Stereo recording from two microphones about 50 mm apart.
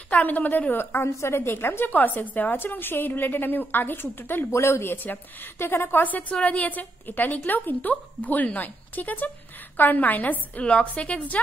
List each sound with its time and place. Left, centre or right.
0.1 s a woman's voice: left
1.0 s a woman's voice: left
4.5 s speech: left
4.8 s a woman's voice: left
6.0 s a woman's voice: left
10.6 s a woman's voice: left